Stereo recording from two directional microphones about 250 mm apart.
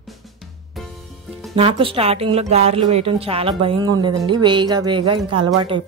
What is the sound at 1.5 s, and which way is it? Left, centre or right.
A woman's voice, right.